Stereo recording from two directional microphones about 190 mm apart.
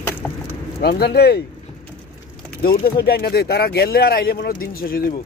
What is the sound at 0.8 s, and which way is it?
Speech, 55° left (ahead or behind).